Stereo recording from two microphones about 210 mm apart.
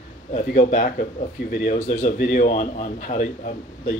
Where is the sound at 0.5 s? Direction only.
35° left (ahead or behind).